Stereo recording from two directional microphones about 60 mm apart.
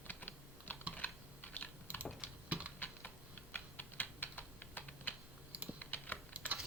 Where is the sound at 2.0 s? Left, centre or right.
Right.